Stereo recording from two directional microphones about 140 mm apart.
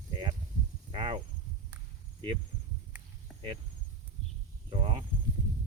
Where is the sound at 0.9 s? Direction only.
40° right (ahead or behind).